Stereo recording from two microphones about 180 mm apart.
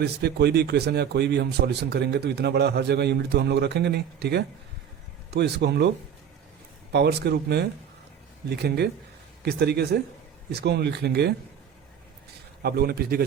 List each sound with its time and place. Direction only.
0.0 s a man's voice: 65° right (ahead or behind)
6.9 s a man's voice: 65° right (ahead or behind)
12.6 s a man's voice: 60° right (ahead or behind)